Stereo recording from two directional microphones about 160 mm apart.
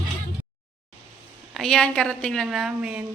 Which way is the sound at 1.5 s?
Centre (ahead or behind).